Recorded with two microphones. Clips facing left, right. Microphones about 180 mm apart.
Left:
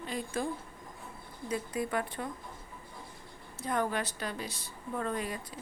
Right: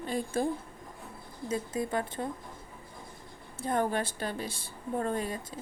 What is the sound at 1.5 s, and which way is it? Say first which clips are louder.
Speech: right 2 dB; 25° right (ahead or behind).